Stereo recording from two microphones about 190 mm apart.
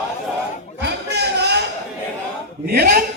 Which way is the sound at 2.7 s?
50° right (ahead or behind).